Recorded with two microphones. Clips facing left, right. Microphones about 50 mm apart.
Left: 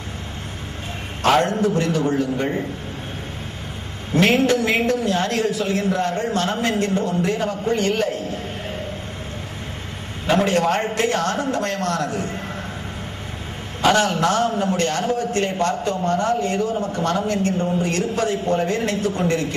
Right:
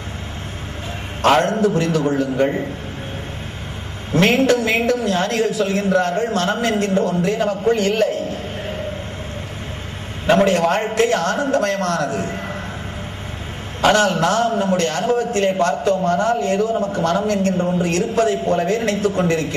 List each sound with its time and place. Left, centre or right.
1.2 s a man's voice: right
4.4 s a man's voice: right
10.2 s a man's voice: right
13.7 s a man's voice: right